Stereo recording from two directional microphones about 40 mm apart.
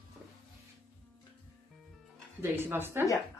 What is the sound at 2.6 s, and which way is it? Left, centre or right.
Speech, right.